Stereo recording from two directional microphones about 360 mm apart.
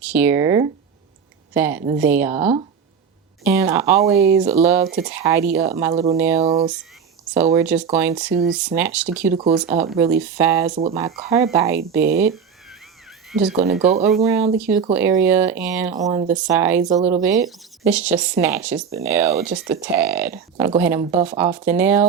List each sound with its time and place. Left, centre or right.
0.1 s speech: centre
3.4 s speech: centre
4.1 s speech: right
5.1 s speech: centre
6.4 s speech: centre
7.4 s speech: centre
8.3 s speech: right
8.5 s speech: centre
9.3 s speech: centre
12.6 s a sound: centre
13.3 s speech: centre
19.4 s speech: right
19.7 s speech: centre
21.7 s speech: centre